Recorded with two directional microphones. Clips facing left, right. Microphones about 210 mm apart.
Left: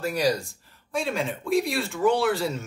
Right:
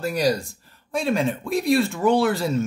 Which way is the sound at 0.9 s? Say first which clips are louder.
Right 5 dB; 40° right (ahead or behind).